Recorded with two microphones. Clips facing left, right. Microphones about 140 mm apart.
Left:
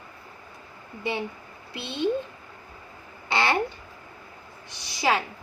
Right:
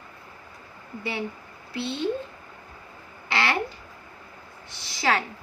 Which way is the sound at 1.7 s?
20° left (ahead or behind).